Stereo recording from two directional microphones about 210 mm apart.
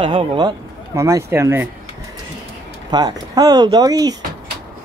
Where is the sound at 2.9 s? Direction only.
20° right (ahead or behind).